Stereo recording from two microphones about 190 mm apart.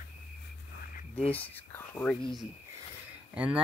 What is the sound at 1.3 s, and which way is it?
Speech, 10° left (ahead or behind).